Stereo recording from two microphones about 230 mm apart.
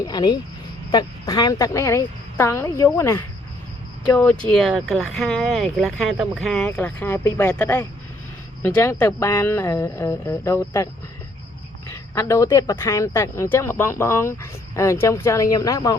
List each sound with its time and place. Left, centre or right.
0.0 s speech: centre
12.1 s speech: centre